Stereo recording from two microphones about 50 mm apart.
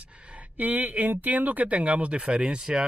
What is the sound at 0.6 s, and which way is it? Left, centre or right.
Speech, right.